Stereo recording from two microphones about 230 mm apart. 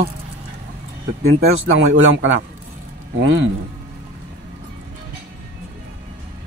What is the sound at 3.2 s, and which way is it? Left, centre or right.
Speech, right.